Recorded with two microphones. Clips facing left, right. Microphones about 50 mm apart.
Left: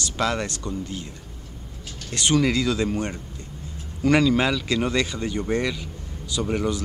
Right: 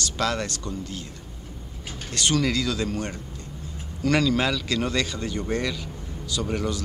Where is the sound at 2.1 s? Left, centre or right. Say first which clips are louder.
Left 3 dB; centre.